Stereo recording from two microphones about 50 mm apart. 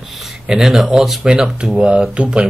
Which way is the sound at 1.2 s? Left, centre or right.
Centre.